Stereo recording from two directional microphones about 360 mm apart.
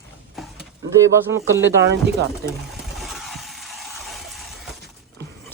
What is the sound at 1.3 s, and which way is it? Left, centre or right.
Speech, centre.